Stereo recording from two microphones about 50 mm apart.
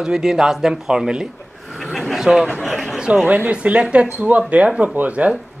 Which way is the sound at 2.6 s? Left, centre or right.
Centre.